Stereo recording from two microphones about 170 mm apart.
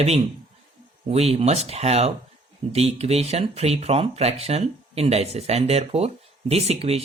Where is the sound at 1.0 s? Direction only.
40° right (ahead or behind).